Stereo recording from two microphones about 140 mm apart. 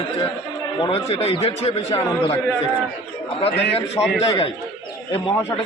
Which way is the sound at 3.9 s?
5° right (ahead or behind).